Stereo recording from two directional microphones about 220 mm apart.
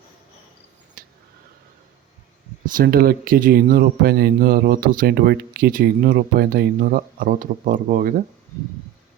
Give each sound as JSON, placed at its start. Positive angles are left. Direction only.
{"t": 2.7, "sound": "speech", "side_deg": -45}